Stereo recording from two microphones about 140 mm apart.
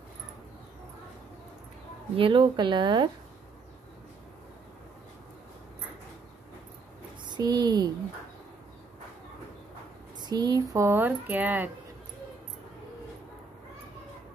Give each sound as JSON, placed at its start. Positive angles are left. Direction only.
{"t": 2.1, "sound": "a woman's voice", "side_deg": -40}
{"t": 7.2, "sound": "speech", "side_deg": -30}
{"t": 10.2, "sound": "speech", "side_deg": -30}